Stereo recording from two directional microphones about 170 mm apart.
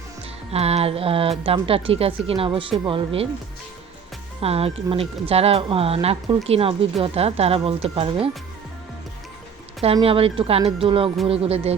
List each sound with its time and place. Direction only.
0.5 s speech: 35° right (ahead or behind)
4.4 s speech: 35° right (ahead or behind)
9.8 s speech: 35° right (ahead or behind)